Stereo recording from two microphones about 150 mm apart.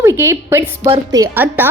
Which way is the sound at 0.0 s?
15° right (ahead or behind).